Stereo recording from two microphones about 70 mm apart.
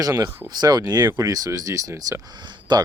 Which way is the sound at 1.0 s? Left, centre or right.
Right.